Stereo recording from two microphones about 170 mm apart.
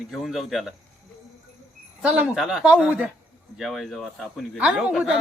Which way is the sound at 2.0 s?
5° right (ahead or behind).